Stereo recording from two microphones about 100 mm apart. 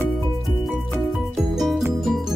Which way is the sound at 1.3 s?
Centre (ahead or behind).